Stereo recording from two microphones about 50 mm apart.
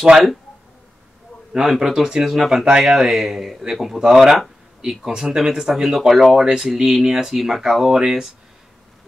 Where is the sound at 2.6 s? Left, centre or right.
Centre.